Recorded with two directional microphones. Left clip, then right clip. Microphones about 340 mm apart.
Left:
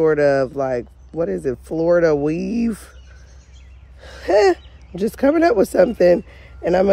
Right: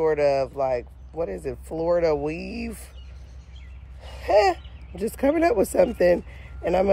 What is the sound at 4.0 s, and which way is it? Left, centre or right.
Speech, left.